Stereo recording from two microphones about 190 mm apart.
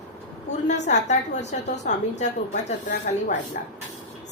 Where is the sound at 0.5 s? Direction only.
40° left (ahead or behind).